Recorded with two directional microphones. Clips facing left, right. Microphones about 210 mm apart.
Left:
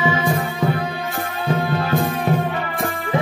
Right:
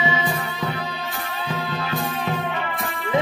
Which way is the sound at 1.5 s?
50° left (ahead or behind).